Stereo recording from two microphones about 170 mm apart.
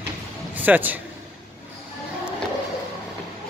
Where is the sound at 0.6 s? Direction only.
10° right (ahead or behind).